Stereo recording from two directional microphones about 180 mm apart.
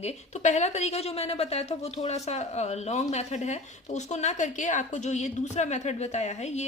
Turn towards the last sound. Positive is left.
turn(degrees=40)  # may be behind; listen again after turning